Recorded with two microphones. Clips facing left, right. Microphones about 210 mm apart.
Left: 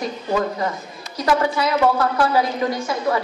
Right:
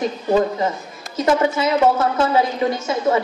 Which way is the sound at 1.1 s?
25° right (ahead or behind).